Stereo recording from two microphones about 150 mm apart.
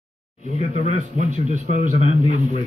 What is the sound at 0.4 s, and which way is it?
Speech, 45° left (ahead or behind).